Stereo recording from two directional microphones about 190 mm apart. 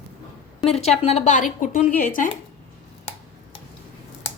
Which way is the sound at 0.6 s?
35° left (ahead or behind).